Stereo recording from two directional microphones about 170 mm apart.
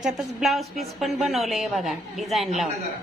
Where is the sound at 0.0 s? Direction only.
Centre (ahead or behind).